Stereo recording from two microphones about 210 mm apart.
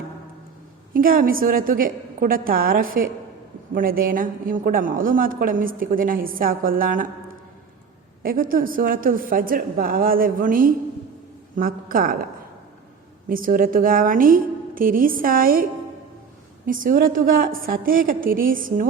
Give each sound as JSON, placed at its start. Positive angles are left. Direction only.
{"t": 0.9, "sound": "a woman's voice", "side_deg": -40}
{"t": 8.2, "sound": "a woman's voice", "side_deg": -45}